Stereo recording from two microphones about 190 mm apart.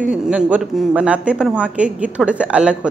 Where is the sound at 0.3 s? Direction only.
5° right (ahead or behind).